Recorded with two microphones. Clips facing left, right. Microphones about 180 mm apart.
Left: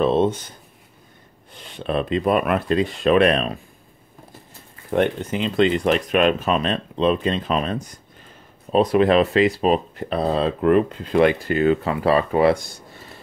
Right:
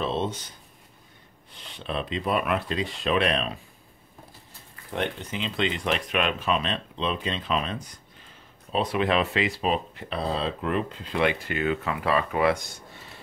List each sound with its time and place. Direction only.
0.0 s speech: 50° left (ahead or behind)
4.9 s speech: 50° left (ahead or behind); by 13.0 s 35° left (ahead or behind)